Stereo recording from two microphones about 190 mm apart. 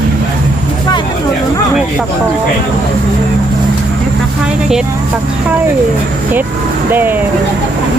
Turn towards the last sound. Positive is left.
turn(degrees=-10)  # may be behind; listen again after turning